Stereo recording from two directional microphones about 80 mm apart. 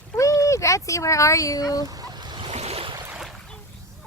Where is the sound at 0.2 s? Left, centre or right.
Left.